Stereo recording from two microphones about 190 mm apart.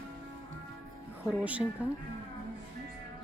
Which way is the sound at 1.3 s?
5° right (ahead or behind).